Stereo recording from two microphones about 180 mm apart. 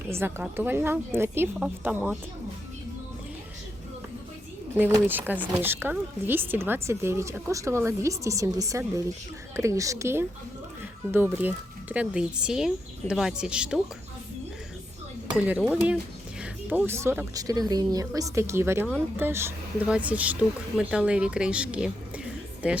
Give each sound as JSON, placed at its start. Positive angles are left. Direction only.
{"t": 0.1, "sound": "speech", "side_deg": -15}
{"t": 5.0, "sound": "speech", "side_deg": -10}
{"t": 15.3, "sound": "speech", "side_deg": -5}